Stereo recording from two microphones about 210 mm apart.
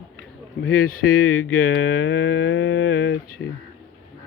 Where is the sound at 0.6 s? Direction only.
80° left.